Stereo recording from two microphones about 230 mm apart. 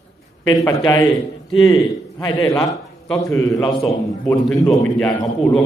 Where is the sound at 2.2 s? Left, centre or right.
Centre.